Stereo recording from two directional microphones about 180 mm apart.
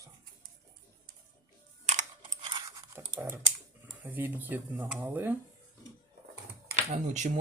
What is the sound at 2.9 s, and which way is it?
Computer keyboard, 10° right (ahead or behind).